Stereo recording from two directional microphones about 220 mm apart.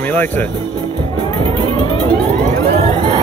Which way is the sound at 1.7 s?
25° left (ahead or behind).